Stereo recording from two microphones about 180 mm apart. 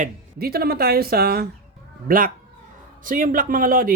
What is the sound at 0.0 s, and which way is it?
A man's voice, 60° right (ahead or behind).